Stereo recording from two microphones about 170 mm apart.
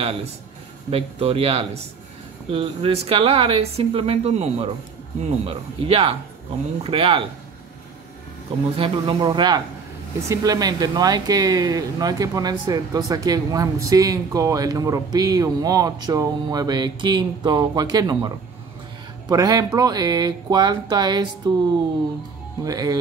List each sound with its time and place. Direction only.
0.8 s speech: 35° right (ahead or behind)
8.7 s speech: 30° right (ahead or behind)
22.6 s speech: 20° right (ahead or behind)